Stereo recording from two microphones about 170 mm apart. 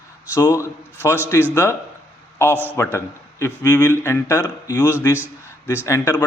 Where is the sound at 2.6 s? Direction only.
15° left (ahead or behind).